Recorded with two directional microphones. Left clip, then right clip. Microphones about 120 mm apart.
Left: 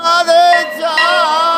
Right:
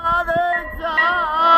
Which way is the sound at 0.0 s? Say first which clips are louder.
Left 9 dB; 15° right (ahead or behind).